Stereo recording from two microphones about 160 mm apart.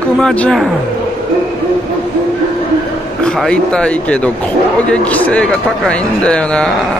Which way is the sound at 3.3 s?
5° left (ahead or behind).